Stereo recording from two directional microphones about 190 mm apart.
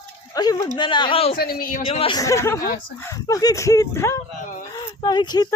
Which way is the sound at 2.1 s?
15° left (ahead or behind).